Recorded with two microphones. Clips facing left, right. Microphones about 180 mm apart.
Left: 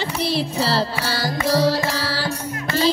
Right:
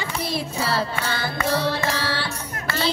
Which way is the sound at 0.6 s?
30° left (ahead or behind).